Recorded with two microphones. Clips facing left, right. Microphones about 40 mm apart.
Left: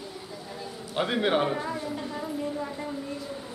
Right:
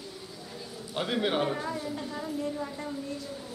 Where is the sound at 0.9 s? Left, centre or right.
Centre.